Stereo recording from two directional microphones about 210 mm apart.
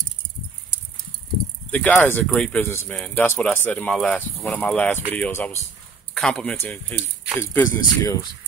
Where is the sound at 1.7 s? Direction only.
10° left (ahead or behind).